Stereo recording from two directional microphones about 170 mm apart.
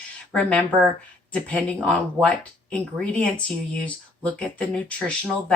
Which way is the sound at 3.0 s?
5° left (ahead or behind).